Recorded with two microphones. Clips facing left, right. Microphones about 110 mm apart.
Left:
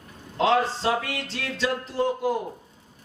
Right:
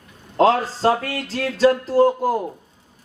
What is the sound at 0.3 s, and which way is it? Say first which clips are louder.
Speech: right 5 dB; 40° right (ahead or behind).